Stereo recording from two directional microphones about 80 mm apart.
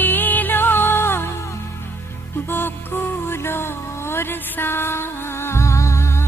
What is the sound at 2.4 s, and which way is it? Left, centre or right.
Music, left.